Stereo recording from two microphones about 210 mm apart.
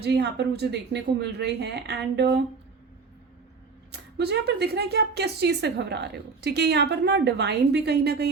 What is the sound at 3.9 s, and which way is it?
Speech, 50° right (ahead or behind).